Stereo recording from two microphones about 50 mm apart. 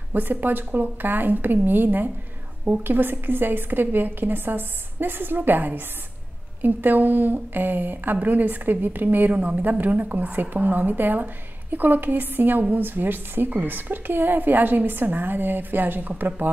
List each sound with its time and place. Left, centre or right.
0.1 s a woman's voice: right